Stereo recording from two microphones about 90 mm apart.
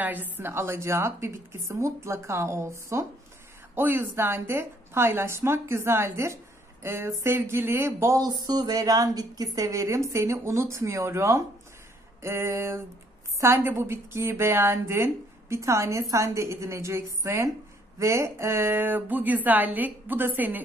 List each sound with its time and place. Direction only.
0.0 s a woman's voice: 20° right (ahead or behind)
8.2 s a woman's voice: 50° right (ahead or behind); by 20.6 s 20° right (ahead or behind)